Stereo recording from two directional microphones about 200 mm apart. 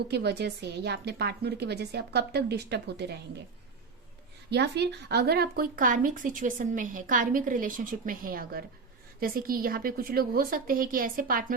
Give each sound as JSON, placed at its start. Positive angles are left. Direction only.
{"t": 0.1, "sound": "speech", "side_deg": -55}
{"t": 4.4, "sound": "speech", "side_deg": -55}